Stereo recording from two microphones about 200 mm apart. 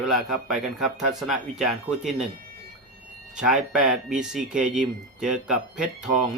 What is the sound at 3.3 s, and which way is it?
Speech, 5° right (ahead or behind).